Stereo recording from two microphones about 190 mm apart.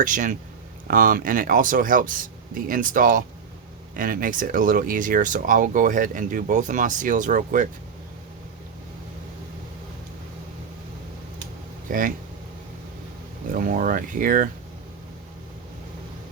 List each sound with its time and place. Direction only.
0.0 s speech: 45° right (ahead or behind)
11.9 s speech: 45° right (ahead or behind)
13.5 s speech: 45° right (ahead or behind)